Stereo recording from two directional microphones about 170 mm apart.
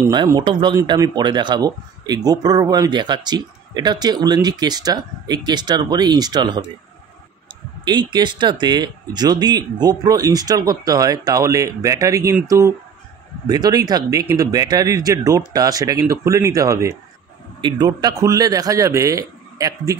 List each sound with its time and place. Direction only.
0.1 s speech: 25° right (ahead or behind)
7.8 s speech: 25° right (ahead or behind)